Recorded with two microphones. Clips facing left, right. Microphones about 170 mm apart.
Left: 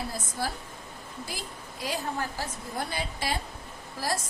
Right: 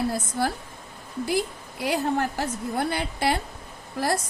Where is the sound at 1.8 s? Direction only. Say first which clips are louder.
Right 8 dB; 65° right (ahead or behind).